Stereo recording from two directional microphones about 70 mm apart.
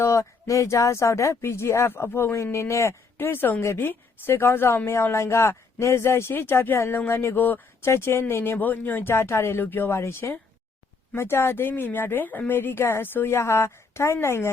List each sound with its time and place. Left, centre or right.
0.0 s speech: left
7.9 s speech: left